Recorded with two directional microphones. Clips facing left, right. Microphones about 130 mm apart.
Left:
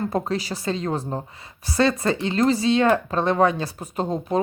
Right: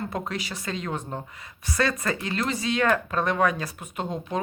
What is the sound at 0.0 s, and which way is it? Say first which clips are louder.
Speech: left 6 dB; 35° left (ahead or behind).